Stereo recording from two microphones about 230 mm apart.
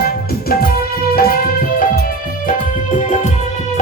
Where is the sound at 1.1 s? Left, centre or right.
Left.